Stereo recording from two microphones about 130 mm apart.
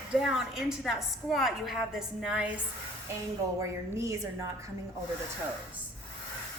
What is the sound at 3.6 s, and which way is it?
Speech, 20° right (ahead or behind).